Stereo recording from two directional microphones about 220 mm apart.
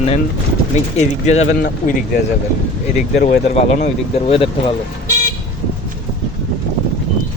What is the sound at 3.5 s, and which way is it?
Speech, 30° left (ahead or behind).